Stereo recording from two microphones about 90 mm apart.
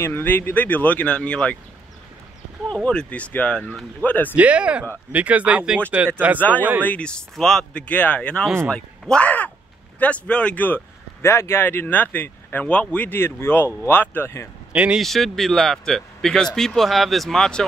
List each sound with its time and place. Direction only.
0.0 s speech: 20° left (ahead or behind)
2.7 s speech: 10° left (ahead or behind)
4.4 s speech: 15° right (ahead or behind)
6.8 s a man's voice: 15° left (ahead or behind)
11.2 s speech: 30° left (ahead or behind)
14.7 s speech: 10° right (ahead or behind)
15.0 s speech: centre (ahead or behind)